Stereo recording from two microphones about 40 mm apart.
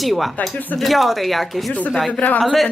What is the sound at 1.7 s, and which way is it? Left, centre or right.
Speech, left.